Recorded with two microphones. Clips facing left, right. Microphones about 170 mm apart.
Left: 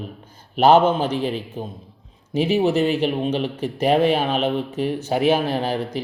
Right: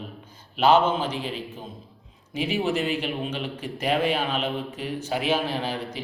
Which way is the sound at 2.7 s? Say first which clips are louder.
Left 7 dB; 40° left (ahead or behind).